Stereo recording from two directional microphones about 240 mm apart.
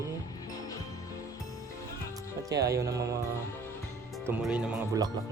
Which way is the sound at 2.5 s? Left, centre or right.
Centre.